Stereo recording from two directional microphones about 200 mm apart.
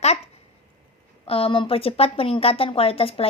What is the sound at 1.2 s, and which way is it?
Speech, 30° left (ahead or behind).